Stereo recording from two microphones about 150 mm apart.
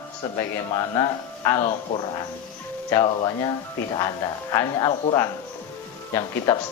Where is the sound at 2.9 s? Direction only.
15° left (ahead or behind).